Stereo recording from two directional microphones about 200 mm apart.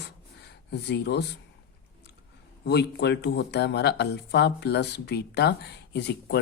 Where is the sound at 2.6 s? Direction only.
55° left (ahead or behind).